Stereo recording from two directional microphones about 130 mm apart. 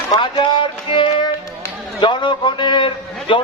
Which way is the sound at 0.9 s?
40° left (ahead or behind).